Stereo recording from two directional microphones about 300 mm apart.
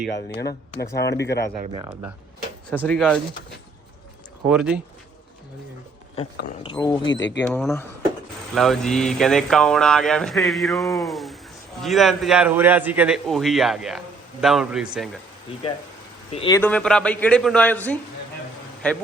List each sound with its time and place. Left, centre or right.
0.1 s speech: left
1.6 s speech: centre
2.6 s speech: centre
4.4 s speech: centre
6.6 s speech: centre
7.1 s speech: left
7.4 s speech: centre
16.3 s speech: centre
16.6 s speech: centre